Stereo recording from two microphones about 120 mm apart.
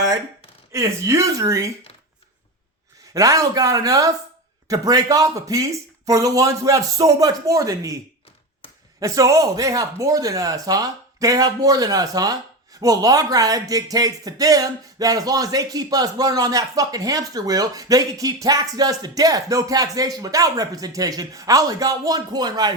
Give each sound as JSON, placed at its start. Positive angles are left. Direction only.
{"t": 0.7, "sound": "speech", "side_deg": -25}
{"t": 3.1, "sound": "speech", "side_deg": -30}
{"t": 9.0, "sound": "speech", "side_deg": -30}